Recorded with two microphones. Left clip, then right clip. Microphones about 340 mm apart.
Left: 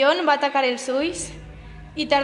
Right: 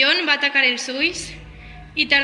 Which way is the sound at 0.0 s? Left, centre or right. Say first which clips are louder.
Right 1 dB; centre.